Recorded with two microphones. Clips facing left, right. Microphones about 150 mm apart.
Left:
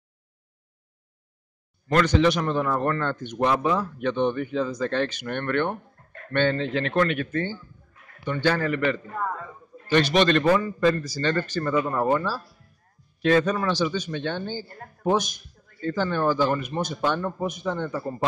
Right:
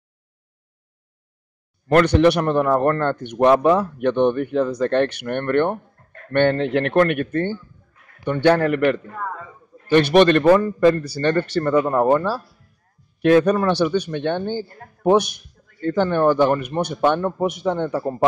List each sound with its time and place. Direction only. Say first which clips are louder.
1.9 s speech: right 6 dB; 60° right (ahead or behind)